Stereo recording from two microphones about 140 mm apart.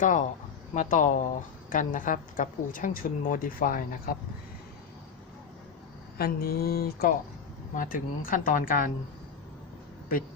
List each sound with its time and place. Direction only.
0.0 s speech: 65° left (ahead or behind); by 4.2 s 85° left
6.1 s mantra: 90° left
7.8 s speech: 85° left